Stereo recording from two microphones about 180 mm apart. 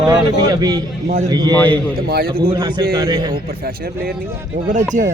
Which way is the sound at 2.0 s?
60° right (ahead or behind).